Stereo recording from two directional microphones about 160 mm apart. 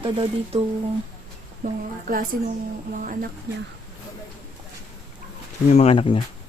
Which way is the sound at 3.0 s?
55° right (ahead or behind).